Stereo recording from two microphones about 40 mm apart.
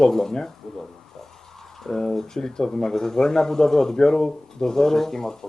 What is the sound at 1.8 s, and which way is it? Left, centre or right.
Speech, centre.